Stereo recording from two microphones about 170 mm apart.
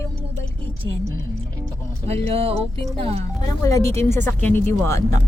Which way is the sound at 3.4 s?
20° left (ahead or behind).